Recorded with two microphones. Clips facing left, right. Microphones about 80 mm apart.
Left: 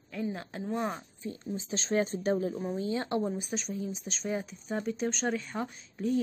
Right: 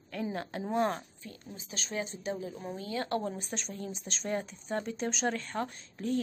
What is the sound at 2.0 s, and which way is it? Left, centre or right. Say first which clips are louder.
Speech: left 7 dB; left.